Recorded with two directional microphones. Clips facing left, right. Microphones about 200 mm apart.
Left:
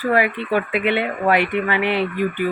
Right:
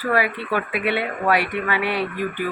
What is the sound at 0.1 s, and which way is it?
Speech, 20° left (ahead or behind).